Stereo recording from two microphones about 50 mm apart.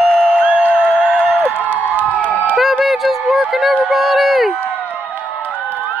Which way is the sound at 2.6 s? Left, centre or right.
Centre.